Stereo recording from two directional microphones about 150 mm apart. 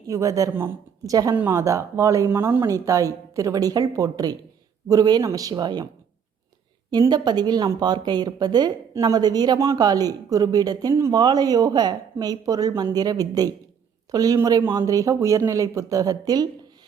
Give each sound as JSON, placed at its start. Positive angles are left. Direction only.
{"t": 0.1, "sound": "speech", "side_deg": -20}
{"t": 7.1, "sound": "speech", "side_deg": -30}